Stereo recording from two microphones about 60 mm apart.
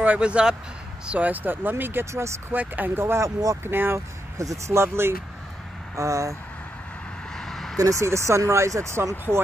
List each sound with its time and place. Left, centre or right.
0.0 s speech: right
3.0 s speech: right
3.3 s speech: right
3.6 s speech: right
4.4 s speech: right
5.9 s speech: right
7.3 s a sound: centre
7.7 s speech: right